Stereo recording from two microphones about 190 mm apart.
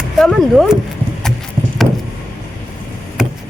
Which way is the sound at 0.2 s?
Centre (ahead or behind).